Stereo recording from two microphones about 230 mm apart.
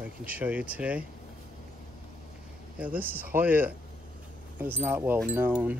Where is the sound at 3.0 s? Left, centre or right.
Right.